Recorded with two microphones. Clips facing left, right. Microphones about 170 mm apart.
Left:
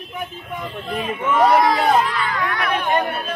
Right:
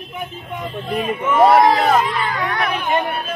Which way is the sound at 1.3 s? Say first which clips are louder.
Right 3 dB; 25° right (ahead or behind).